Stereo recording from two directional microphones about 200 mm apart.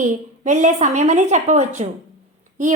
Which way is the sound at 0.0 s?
35° right (ahead or behind).